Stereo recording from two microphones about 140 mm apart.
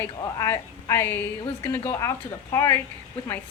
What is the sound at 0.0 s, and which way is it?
A woman's voice, 20° left (ahead or behind).